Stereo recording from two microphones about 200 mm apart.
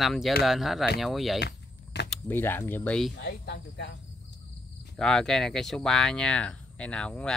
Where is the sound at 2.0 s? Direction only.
10° left (ahead or behind).